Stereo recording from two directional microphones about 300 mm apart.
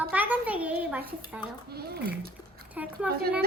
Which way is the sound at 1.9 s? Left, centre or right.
Right.